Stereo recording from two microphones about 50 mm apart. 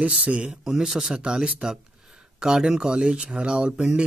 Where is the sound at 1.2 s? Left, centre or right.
Centre.